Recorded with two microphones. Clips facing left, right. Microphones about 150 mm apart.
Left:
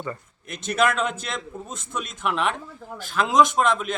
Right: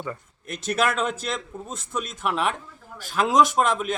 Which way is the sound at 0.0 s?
Centre (ahead or behind).